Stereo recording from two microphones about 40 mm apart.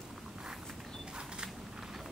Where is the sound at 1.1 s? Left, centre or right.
Centre.